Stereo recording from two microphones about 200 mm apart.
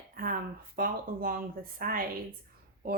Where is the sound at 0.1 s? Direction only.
45° right (ahead or behind).